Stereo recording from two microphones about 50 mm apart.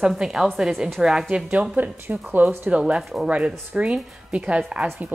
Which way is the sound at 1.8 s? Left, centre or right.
Right.